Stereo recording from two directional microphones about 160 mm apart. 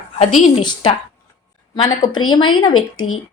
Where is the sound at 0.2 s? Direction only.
45° left (ahead or behind).